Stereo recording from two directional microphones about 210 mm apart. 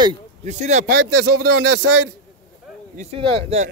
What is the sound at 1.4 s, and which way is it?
Speech, 90° right.